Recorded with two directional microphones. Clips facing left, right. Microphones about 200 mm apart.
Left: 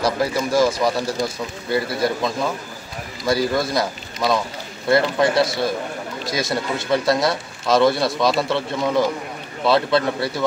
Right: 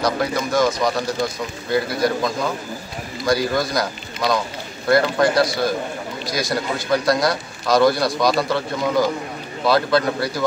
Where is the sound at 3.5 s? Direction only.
5° left (ahead or behind).